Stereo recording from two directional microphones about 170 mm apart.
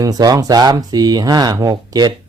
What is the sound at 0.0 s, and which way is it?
Speech, 20° right (ahead or behind).